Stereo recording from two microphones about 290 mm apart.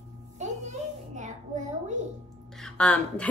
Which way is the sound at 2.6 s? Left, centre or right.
Centre.